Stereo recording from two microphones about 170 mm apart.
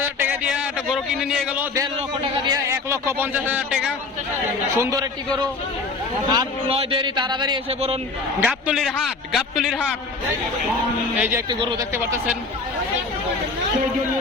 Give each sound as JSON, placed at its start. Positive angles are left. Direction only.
{"t": 0.2, "sound": "a man's voice", "side_deg": -10}
{"t": 2.5, "sound": "a man's voice", "side_deg": -15}
{"t": 4.8, "sound": "a man's voice", "side_deg": -20}
{"t": 6.3, "sound": "a man's voice", "side_deg": -25}
{"t": 8.4, "sound": "a man's voice", "side_deg": -5}
{"t": 11.2, "sound": "a man's voice", "side_deg": -10}
{"t": 11.4, "sound": "a man's voice", "side_deg": -25}
{"t": 11.9, "sound": "a man's voice", "side_deg": -15}